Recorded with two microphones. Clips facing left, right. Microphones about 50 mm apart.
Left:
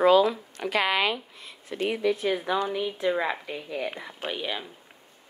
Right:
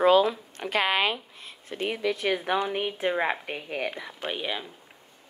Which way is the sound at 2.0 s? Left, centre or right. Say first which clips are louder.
Left 3 dB; right.